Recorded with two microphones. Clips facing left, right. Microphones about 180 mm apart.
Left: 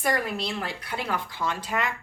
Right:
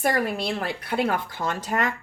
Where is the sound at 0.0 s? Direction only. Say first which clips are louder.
Right 3 dB; 50° right (ahead or behind).